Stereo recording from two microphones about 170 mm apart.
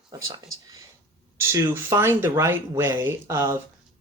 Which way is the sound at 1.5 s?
15° right (ahead or behind).